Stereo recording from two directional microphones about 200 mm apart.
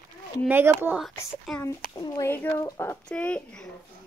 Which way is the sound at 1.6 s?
20° left (ahead or behind).